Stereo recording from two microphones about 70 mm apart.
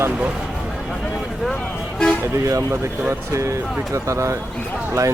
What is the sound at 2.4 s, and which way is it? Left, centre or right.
Speech, right.